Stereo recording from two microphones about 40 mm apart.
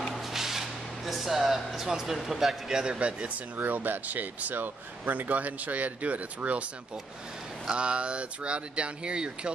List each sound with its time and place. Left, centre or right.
0.1 s a sound: centre
2.2 s speech: centre
3.0 s speech: right
3.5 s speech: right
7.7 s speech: right